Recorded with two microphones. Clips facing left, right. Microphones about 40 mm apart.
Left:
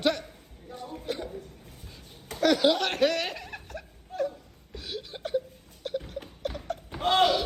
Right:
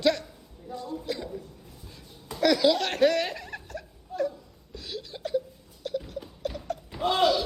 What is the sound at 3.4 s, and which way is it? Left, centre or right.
Chuckle, left.